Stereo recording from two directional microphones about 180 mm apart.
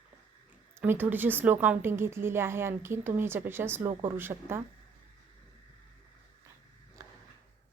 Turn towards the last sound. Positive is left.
turn(degrees=-20)  # may be behind; listen again after turning